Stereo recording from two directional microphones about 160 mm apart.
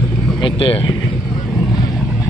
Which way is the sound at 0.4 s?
35° left (ahead or behind).